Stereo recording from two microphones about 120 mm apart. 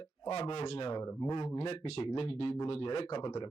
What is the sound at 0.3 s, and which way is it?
Speech, 55° left (ahead or behind).